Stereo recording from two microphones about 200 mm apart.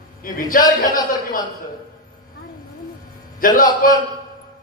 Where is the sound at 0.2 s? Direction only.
45° left (ahead or behind).